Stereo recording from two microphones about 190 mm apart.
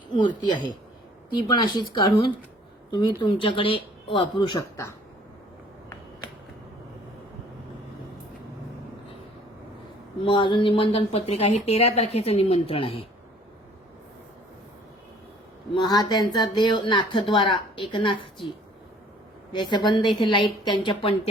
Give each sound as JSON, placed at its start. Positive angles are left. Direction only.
{"t": 1.4, "sound": "speech", "side_deg": 25}
{"t": 10.2, "sound": "speech", "side_deg": 25}
{"t": 15.7, "sound": "speech", "side_deg": 20}
{"t": 19.5, "sound": "speech", "side_deg": 25}